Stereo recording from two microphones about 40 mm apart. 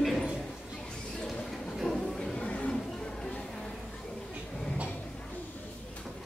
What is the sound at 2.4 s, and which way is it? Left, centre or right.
Chatter, left.